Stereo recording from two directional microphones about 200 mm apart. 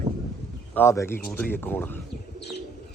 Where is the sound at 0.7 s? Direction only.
15° left (ahead or behind).